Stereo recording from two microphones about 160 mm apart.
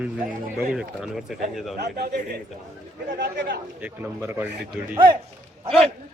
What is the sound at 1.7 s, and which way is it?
Speech, 90° right.